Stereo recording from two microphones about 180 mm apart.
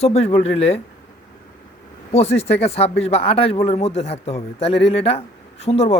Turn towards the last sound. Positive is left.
turn(degrees=35)  # may be behind; listen again after turning